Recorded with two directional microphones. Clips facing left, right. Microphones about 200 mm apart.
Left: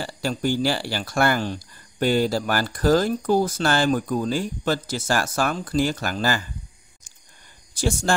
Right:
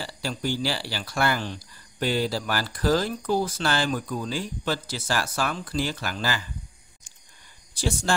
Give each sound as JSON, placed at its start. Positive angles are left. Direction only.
{"t": 0.0, "sound": "speech", "side_deg": 50}
{"t": 7.7, "sound": "speech", "side_deg": 45}